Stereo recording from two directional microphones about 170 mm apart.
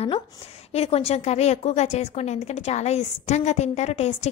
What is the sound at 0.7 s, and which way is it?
A woman's voice, 35° left (ahead or behind).